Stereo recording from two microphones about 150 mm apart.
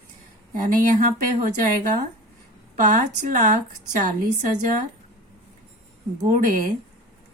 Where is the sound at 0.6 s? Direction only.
65° right (ahead or behind).